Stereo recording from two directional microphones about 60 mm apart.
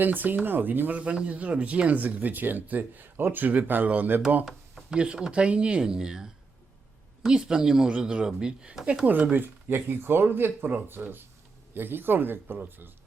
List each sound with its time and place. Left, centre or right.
0.0 s speech: right
4.9 s speech: centre
9.0 s speech: right